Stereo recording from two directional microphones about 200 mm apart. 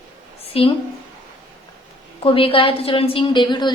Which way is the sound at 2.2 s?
25° left (ahead or behind).